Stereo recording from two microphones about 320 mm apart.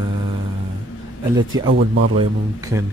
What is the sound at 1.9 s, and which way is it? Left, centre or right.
Speech, right.